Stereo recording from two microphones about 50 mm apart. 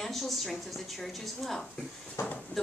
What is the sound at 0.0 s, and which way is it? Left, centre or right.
A woman's voice, centre.